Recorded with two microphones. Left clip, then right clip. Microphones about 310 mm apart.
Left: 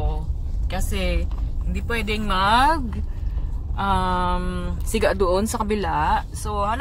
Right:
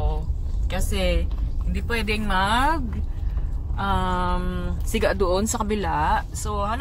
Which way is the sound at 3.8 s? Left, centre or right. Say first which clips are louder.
Left 3 dB; centre.